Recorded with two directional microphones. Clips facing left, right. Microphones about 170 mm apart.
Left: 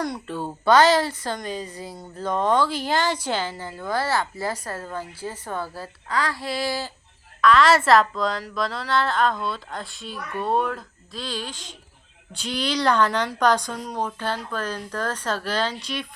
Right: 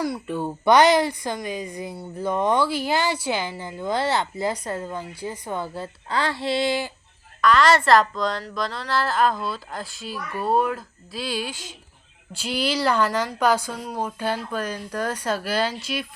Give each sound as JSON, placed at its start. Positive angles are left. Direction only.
{"t": 0.0, "sound": "a woman's voice", "side_deg": -10}
{"t": 7.4, "sound": "a woman's voice", "side_deg": 0}